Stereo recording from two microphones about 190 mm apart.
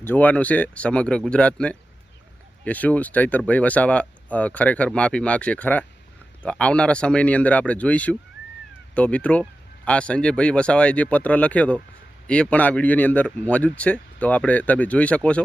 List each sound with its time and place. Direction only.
0.0 s speech: 10° left (ahead or behind)